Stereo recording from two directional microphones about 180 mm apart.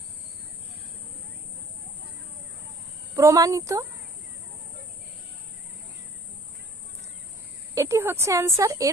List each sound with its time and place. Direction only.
3.2 s speech: 20° right (ahead or behind)
7.8 s speech: 15° right (ahead or behind)